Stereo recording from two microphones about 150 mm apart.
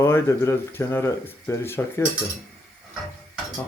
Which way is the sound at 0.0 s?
15° left (ahead or behind).